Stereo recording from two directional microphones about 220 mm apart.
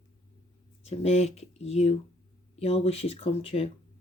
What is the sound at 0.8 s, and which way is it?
Speech, 30° left (ahead or behind).